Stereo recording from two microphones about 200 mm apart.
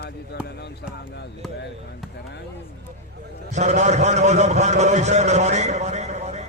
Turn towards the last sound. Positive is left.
turn(degrees=-35)  # may be behind; listen again after turning